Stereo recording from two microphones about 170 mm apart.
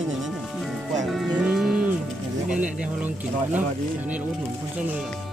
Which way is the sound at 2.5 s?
5° right (ahead or behind).